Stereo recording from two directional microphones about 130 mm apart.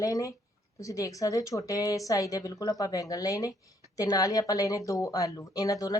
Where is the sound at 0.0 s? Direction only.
25° left (ahead or behind).